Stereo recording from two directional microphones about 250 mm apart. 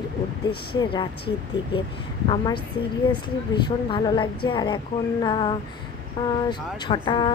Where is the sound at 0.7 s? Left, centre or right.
Centre.